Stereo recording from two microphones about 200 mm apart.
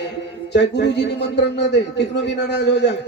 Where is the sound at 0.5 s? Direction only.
60° left (ahead or behind).